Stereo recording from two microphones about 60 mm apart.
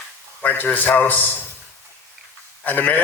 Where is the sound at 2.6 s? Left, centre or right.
Left.